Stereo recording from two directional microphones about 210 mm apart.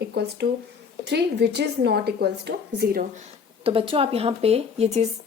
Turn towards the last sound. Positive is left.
turn(degrees=-30)  # may be behind; listen again after turning